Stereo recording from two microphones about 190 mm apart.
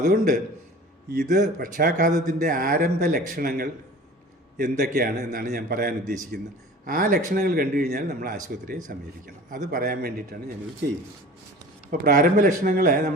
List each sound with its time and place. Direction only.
0.0 s speech: 45° right (ahead or behind)
11.9 s speech: 45° right (ahead or behind)